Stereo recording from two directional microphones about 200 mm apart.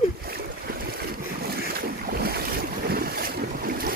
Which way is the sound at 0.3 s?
50° right (ahead or behind).